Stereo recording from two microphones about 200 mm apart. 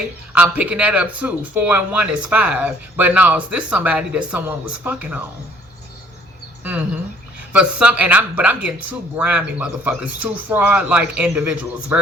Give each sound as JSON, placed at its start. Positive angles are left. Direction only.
{"t": 0.3, "sound": "speech", "side_deg": -5}
{"t": 7.5, "sound": "speech", "side_deg": -5}